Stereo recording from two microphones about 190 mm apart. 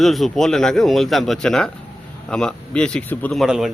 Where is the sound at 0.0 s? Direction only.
Centre (ahead or behind).